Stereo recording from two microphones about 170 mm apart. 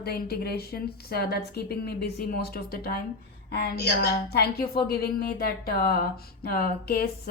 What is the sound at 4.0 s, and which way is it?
A woman's voice, 70° left (ahead or behind).